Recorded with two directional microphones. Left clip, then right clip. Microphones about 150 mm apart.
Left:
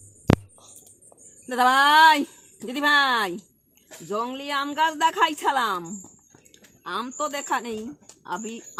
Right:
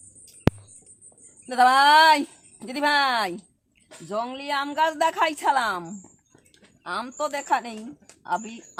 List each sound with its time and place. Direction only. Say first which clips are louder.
1.5 s a woman's voice: right 2 dB; 25° right (ahead or behind)